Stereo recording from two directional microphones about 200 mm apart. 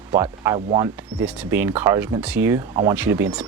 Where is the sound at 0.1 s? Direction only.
10° right (ahead or behind).